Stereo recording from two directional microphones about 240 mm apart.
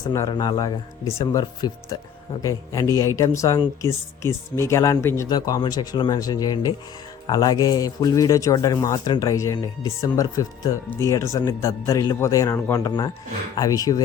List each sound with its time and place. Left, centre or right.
0.1 s speech: centre